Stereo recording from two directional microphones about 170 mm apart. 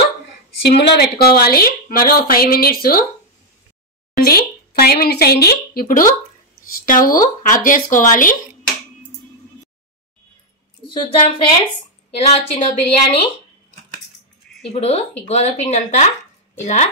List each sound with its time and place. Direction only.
0.6 s a woman's voice: 75° left (ahead or behind); by 3.1 s 60° left (ahead or behind)
4.2 s speech: 65° left (ahead or behind)
10.9 s a woman's voice: 30° left (ahead or behind)
12.3 s a woman's voice: 40° left (ahead or behind)
14.7 s a woman's voice: 35° left (ahead or behind)